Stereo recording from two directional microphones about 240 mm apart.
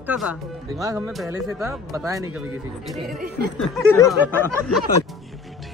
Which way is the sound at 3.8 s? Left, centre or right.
Centre.